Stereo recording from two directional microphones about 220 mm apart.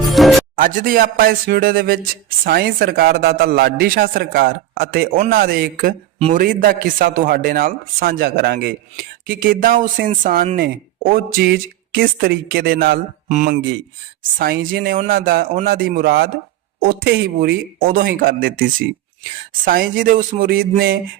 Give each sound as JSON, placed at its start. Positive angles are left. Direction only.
{"t": 0.0, "sound": "music", "side_deg": 0}
{"t": 0.5, "sound": "a man's voice", "side_deg": -40}
{"t": 6.1, "sound": "a man's voice", "side_deg": -25}
{"t": 6.4, "sound": "a man's voice", "side_deg": -40}
{"t": 19.6, "sound": "a man's voice", "side_deg": -40}